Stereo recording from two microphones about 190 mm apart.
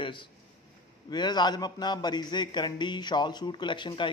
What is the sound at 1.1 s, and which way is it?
A man's voice, 20° left (ahead or behind).